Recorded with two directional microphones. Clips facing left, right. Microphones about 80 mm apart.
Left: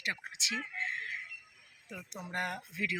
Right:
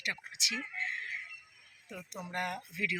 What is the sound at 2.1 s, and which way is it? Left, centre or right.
Speech, left.